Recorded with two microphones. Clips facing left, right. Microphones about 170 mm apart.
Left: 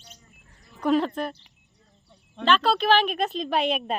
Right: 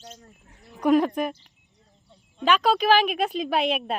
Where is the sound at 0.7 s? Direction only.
10° right (ahead or behind).